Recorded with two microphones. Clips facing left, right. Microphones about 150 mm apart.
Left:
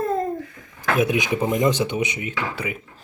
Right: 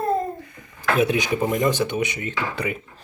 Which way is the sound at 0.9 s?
15° left (ahead or behind).